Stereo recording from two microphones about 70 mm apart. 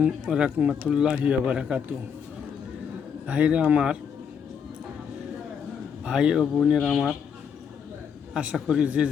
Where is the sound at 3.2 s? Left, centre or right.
Centre.